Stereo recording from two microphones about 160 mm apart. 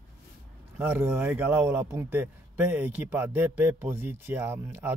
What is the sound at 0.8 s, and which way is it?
A man's voice, 15° right (ahead or behind).